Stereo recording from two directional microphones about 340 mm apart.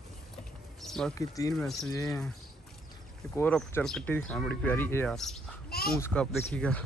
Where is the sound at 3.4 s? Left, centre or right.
Centre.